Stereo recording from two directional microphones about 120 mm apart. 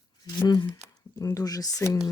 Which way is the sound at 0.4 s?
35° left (ahead or behind).